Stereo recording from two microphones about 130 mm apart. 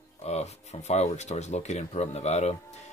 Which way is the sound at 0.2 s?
55° left (ahead or behind).